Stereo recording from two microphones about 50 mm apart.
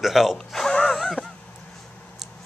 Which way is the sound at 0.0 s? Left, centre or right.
Centre.